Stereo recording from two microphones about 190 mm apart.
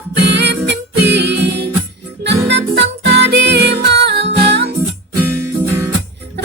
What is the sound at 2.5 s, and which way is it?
Music, 65° right (ahead or behind).